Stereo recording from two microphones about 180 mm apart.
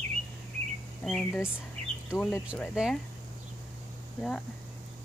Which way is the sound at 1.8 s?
35° right (ahead or behind).